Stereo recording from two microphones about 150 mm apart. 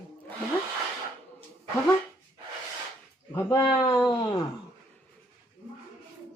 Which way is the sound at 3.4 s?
25° left (ahead or behind).